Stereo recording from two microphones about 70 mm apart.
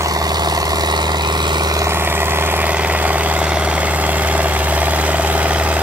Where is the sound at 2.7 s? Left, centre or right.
Right.